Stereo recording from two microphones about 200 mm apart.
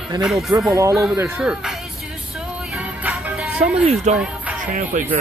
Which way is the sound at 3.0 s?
5° right (ahead or behind).